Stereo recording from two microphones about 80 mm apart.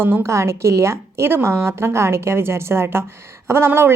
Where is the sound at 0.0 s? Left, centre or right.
Right.